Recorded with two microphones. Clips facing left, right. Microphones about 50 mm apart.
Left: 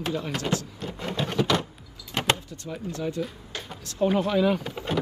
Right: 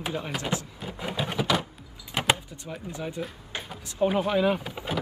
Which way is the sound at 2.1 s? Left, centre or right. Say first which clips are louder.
Even; centre.